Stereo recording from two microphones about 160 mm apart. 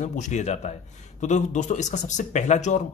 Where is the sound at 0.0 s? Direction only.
50° left (ahead or behind).